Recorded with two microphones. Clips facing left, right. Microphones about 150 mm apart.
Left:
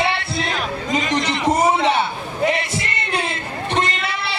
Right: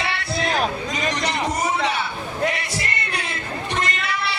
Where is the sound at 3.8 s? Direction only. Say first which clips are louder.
Left 1 dB; 25° left (ahead or behind).